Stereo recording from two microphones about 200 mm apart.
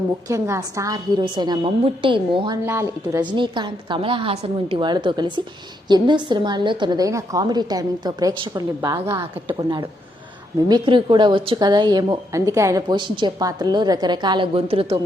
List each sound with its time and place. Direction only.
0.3 s a woman's voice: 15° right (ahead or behind)
2.6 s a woman's voice: 15° right (ahead or behind); by 14.9 s 30° right (ahead or behind)